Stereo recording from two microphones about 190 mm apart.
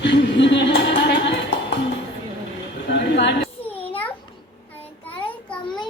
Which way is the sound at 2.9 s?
65° left (ahead or behind).